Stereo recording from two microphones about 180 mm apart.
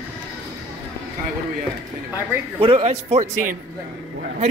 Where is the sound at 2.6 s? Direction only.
30° right (ahead or behind).